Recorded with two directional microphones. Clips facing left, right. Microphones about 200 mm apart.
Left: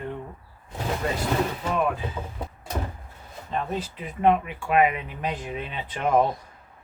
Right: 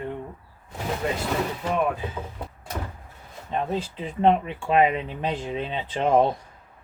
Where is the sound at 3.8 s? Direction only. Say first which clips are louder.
Right 1 dB; 30° right (ahead or behind).